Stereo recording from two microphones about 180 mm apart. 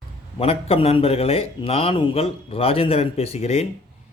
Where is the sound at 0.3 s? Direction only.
35° left (ahead or behind).